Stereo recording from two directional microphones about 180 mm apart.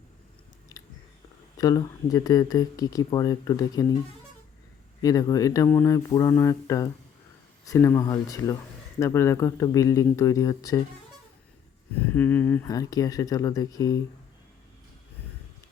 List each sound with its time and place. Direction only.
0.7 s biting: 15° left (ahead or behind)
1.5 s speech: 20° left (ahead or behind)
5.0 s speech: 20° left (ahead or behind)
11.9 s speech: 10° left (ahead or behind)